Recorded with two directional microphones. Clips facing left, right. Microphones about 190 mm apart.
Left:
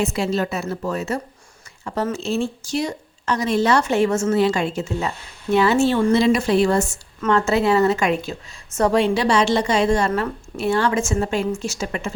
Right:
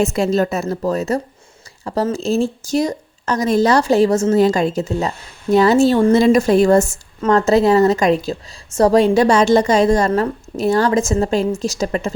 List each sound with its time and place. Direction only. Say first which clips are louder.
0.0 s a woman's voice: right 5 dB; 45° right (ahead or behind)